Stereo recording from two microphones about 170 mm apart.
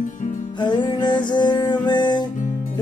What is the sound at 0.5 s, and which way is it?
Music, 25° left (ahead or behind).